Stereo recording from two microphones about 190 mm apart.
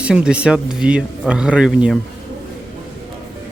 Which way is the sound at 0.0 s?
5° right (ahead or behind).